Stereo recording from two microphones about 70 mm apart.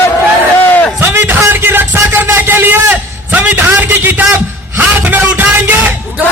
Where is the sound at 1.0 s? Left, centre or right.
Right.